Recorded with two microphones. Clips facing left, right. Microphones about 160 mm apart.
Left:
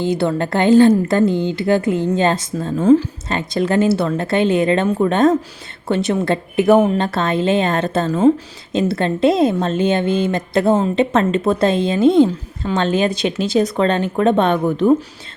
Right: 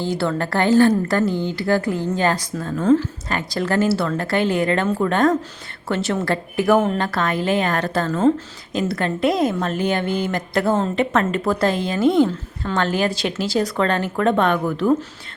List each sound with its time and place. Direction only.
0.0 s a woman's voice: 20° left (ahead or behind)
8.7 s a woman's voice: 25° left (ahead or behind)